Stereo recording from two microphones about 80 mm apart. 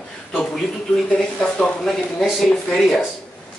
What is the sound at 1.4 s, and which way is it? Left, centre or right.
Speech, centre.